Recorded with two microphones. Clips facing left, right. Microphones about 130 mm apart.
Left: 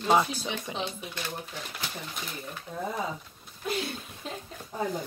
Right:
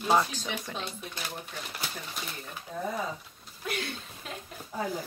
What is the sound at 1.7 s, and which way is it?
Speech, centre (ahead or behind).